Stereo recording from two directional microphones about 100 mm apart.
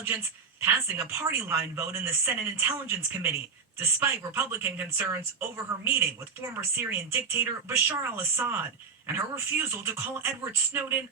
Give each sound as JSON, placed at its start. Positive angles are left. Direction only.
{"t": 0.1, "sound": "a woman's voice", "side_deg": -25}